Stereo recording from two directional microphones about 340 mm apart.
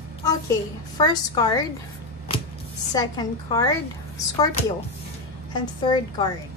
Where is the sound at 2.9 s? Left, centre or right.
Centre.